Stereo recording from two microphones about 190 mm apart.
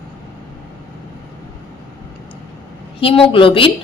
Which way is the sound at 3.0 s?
30° left (ahead or behind).